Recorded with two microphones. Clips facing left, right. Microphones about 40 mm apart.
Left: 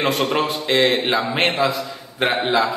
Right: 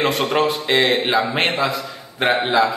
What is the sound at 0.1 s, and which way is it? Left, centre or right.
A man's voice, centre.